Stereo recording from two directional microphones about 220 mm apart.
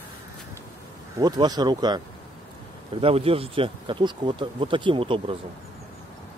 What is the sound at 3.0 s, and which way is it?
Speech, 25° right (ahead or behind).